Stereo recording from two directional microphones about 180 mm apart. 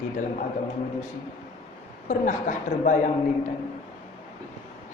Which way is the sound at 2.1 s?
45° left (ahead or behind).